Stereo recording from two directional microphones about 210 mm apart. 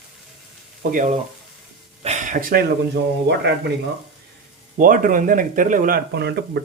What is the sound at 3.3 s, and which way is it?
Speech, 55° right (ahead or behind).